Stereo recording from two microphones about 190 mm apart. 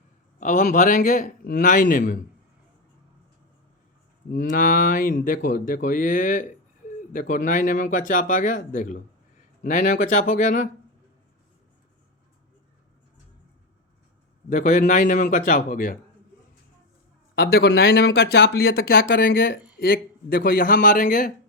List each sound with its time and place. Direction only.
0.3 s speech: 40° left (ahead or behind)
4.3 s speech: 45° left (ahead or behind)
14.5 s speech: 40° left (ahead or behind)
17.3 s speech: 50° left (ahead or behind)